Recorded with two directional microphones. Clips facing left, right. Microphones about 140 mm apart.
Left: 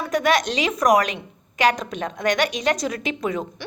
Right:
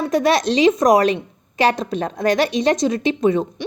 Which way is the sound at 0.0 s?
30° right (ahead or behind).